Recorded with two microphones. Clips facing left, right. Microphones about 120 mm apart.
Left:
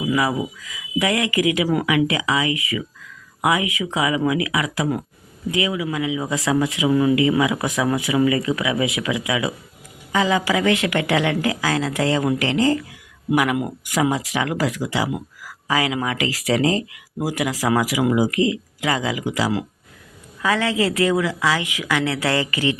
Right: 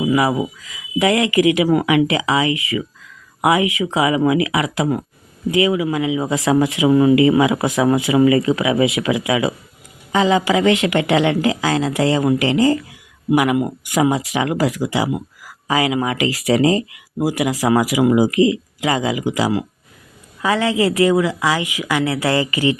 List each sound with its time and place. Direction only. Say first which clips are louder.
0.0 s a woman's voice: right 4 dB; 25° right (ahead or behind)
5.5 s a woman's voice: right 6 dB; 35° right (ahead or behind); by 22.8 s 15° right (ahead or behind)